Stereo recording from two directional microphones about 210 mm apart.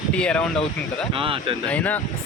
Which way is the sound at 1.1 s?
25° right (ahead or behind).